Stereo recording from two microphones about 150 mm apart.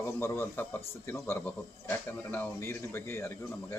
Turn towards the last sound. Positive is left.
turn(degrees=15)  # may be behind; listen again after turning